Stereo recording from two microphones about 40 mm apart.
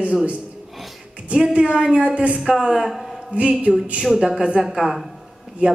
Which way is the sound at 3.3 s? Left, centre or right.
Right.